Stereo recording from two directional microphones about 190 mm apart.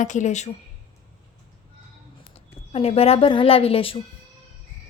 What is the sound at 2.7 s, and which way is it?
A woman's voice, 30° left (ahead or behind).